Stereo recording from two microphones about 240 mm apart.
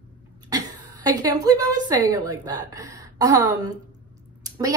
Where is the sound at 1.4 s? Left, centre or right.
Centre.